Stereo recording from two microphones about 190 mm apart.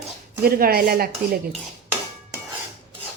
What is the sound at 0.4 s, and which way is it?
Speech, 50° right (ahead or behind).